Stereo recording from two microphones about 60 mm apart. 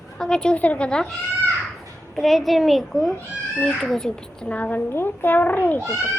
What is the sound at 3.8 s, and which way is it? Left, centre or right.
Speech, centre.